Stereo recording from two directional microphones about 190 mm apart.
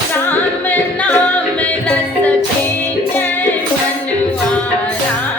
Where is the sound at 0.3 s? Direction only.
10° left (ahead or behind).